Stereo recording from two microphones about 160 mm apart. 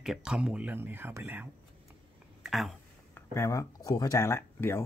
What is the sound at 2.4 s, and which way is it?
Speech, centre (ahead or behind).